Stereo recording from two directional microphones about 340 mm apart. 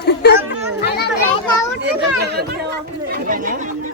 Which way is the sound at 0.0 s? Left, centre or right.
Left.